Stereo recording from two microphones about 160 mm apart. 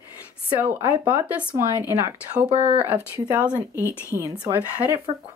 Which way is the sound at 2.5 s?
40° right (ahead or behind).